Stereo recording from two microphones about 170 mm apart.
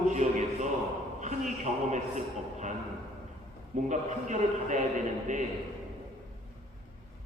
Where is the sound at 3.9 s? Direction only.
45° right (ahead or behind).